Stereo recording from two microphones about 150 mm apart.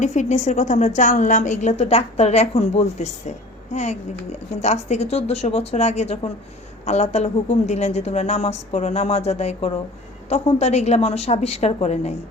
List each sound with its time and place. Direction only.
0.0 s a woman's voice: 55° left (ahead or behind)